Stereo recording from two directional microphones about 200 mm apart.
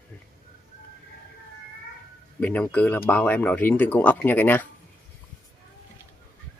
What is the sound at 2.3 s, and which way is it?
Speech, 10° left (ahead or behind).